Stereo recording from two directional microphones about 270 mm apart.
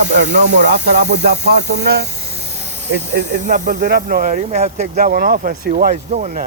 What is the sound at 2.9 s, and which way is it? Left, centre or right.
Speech, right.